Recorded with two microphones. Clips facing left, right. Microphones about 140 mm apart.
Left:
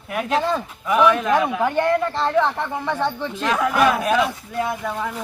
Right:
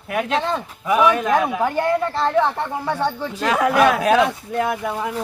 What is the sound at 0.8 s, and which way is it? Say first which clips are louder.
Speech: even; 5° right (ahead or behind).